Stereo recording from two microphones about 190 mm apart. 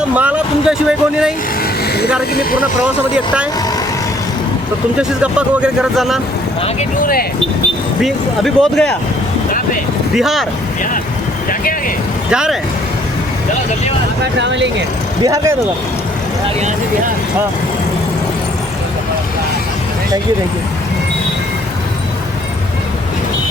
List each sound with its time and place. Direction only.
0.1 s speech: 5° right (ahead or behind)
2.3 s speech: 50° left (ahead or behind)
4.9 s speech: 5° right (ahead or behind)
7.0 s speech: 50° left (ahead or behind)
8.0 s speech: centre (ahead or behind)
10.2 s speech: centre (ahead or behind)
12.3 s speech: 5° right (ahead or behind)
14.3 s speech: 70° right (ahead or behind)
15.2 s speech: 20° right (ahead or behind)